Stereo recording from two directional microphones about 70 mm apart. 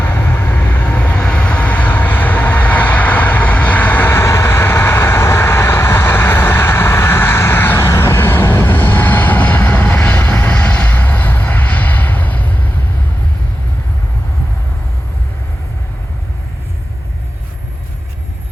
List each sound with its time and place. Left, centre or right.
0.0 s vehicle: left